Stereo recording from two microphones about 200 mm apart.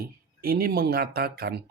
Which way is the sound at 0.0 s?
50° right (ahead or behind).